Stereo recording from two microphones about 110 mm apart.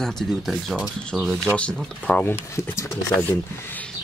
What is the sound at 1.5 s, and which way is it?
Speech, 10° left (ahead or behind).